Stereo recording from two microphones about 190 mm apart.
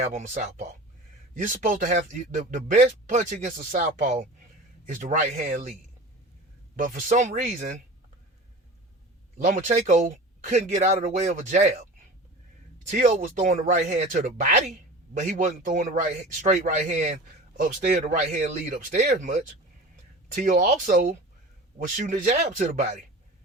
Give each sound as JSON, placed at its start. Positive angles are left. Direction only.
{"t": 0.0, "sound": "a man's voice", "side_deg": -40}
{"t": 6.7, "sound": "a man's voice", "side_deg": -45}
{"t": 9.4, "sound": "speech", "side_deg": -45}
{"t": 12.9, "sound": "a man's voice", "side_deg": -40}